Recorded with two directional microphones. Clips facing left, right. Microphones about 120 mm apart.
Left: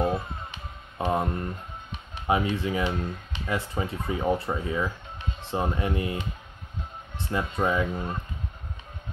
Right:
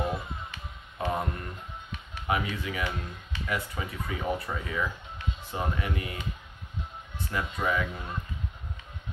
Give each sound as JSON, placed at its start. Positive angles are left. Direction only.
{"t": 0.0, "sound": "music", "side_deg": 25}
{"t": 2.2, "sound": "speech", "side_deg": 25}